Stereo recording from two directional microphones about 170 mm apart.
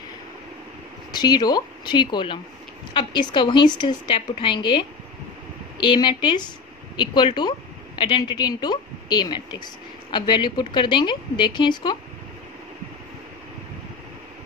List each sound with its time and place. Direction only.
1.1 s a woman's voice: 25° left (ahead or behind)
5.9 s a woman's voice: 25° left (ahead or behind)